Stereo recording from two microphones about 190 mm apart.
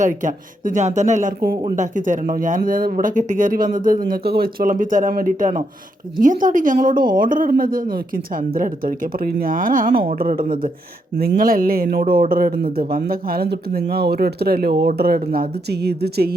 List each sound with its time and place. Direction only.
0.0 s speech: 40° right (ahead or behind)